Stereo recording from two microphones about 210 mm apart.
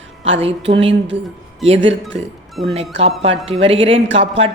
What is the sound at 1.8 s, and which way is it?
Speech, 60° right (ahead or behind).